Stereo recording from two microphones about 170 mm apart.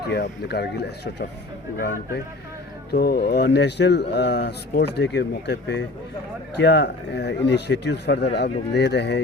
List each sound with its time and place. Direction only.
0.1 s speech: 75° left (ahead or behind)
1.8 s speech: 60° left (ahead or behind); by 9.2 s 90° left